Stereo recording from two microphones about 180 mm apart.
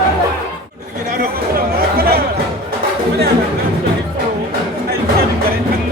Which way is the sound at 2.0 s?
60° right (ahead or behind).